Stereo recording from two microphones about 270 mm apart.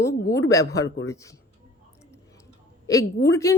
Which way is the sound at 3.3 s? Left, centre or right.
Centre.